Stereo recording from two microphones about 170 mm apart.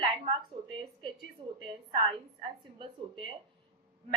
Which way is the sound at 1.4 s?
30° right (ahead or behind).